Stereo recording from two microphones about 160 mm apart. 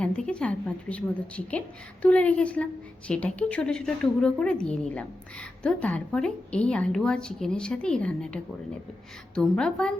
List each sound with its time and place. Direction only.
0.0 s a woman's voice: 5° left (ahead or behind)